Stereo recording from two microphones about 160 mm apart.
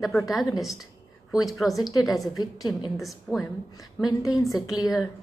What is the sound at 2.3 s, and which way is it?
Speech, 25° left (ahead or behind).